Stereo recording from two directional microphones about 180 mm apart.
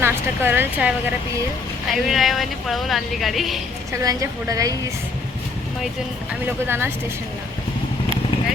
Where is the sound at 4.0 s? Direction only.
20° right (ahead or behind).